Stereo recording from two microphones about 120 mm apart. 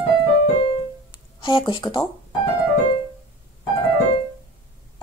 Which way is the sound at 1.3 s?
40° left (ahead or behind).